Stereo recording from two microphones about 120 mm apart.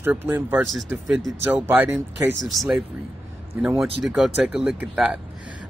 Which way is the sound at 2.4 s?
Centre (ahead or behind).